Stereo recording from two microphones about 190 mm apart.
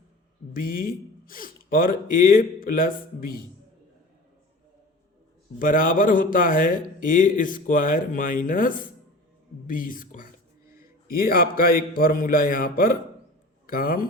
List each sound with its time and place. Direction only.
0.5 s a man's voice: 50° left (ahead or behind)
5.5 s a man's voice: 45° left (ahead or behind)